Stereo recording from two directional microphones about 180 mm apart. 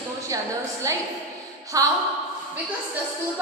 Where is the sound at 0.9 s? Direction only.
20° right (ahead or behind).